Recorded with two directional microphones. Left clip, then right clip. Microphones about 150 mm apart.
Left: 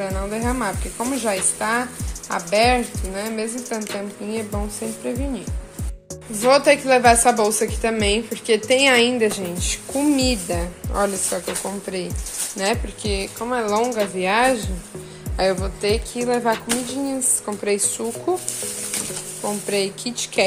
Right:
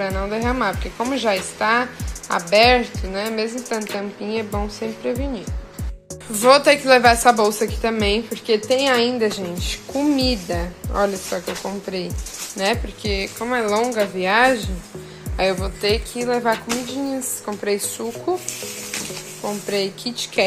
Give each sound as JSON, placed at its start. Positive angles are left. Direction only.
{"t": 0.0, "sound": "speech", "side_deg": 0}
{"t": 8.6, "sound": "a woman's voice", "side_deg": 20}
{"t": 9.4, "sound": "speech", "side_deg": 5}
{"t": 16.3, "sound": "speech", "side_deg": 0}
{"t": 16.8, "sound": "speech", "side_deg": 10}
{"t": 19.6, "sound": "speech", "side_deg": 10}